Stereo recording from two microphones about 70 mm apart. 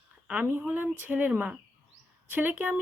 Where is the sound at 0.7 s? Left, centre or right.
Right.